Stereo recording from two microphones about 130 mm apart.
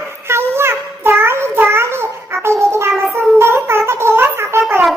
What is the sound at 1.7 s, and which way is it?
Babbling, 20° right (ahead or behind).